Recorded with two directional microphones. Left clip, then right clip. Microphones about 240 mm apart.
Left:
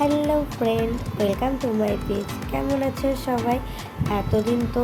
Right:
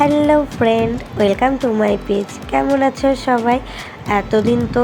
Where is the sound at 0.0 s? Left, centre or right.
Centre.